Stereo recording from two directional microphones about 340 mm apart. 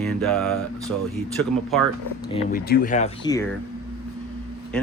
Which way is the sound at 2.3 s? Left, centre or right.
Left.